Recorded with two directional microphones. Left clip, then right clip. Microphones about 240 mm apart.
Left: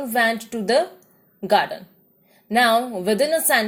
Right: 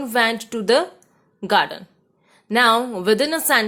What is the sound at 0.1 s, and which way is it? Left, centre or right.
A woman's voice, centre.